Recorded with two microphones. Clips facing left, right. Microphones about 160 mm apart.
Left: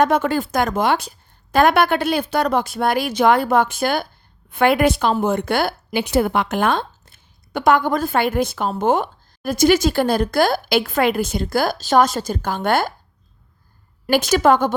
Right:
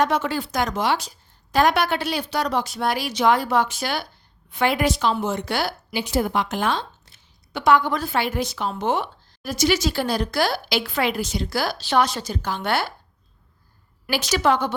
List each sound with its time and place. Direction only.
0.0 s a woman's voice: 50° left (ahead or behind)
14.1 s a woman's voice: 50° left (ahead or behind)